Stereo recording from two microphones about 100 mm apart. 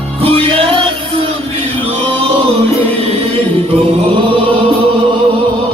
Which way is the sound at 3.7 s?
75° right (ahead or behind).